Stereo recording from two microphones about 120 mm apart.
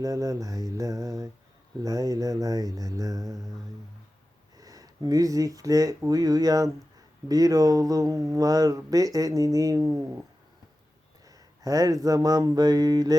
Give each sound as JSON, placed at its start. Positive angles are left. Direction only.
{"t": 0.0, "sound": "speech", "side_deg": -30}
{"t": 4.5, "sound": "speech", "side_deg": -30}
{"t": 11.3, "sound": "a sound", "side_deg": -30}